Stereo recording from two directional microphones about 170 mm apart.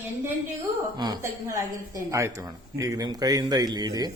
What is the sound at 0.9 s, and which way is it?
A woman's voice, 25° right (ahead or behind).